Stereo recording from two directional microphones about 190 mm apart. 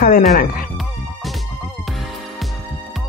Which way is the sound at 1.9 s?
Centre (ahead or behind).